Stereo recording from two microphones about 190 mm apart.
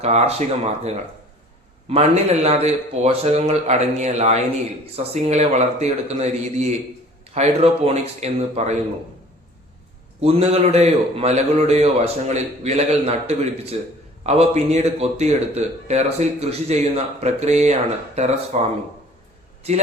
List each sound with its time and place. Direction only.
0.0 s speech: 35° right (ahead or behind)
10.2 s speech: 35° right (ahead or behind)